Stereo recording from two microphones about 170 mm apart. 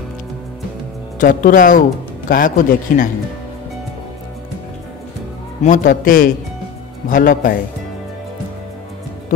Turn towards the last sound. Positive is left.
turn(degrees=55)  # may be behind; listen again after turning